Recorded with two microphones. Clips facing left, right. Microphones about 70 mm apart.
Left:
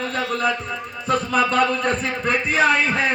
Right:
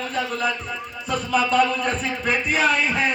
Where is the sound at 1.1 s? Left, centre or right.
Left.